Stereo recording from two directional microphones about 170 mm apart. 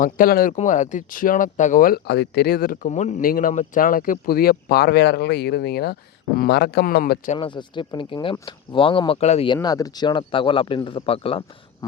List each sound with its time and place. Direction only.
0.0 s speech: 55° left (ahead or behind)
2.9 s speech: 45° left (ahead or behind); by 7.2 s 60° left (ahead or behind)
7.3 s speech: 30° left (ahead or behind)
9.5 s speech: 20° left (ahead or behind)
11.8 s speech: 20° left (ahead or behind)